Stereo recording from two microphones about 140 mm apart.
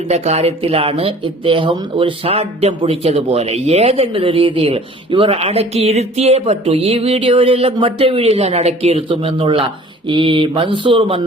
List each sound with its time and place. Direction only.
0.1 s speech: 50° right (ahead or behind)